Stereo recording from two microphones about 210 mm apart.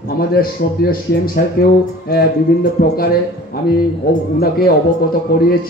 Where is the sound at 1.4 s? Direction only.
45° left (ahead or behind).